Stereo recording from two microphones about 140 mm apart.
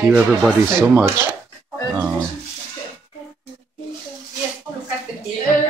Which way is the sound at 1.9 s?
10° right (ahead or behind).